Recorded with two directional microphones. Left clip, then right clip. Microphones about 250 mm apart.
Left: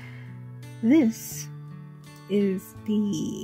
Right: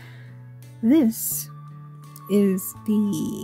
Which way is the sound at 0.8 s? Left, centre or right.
Centre.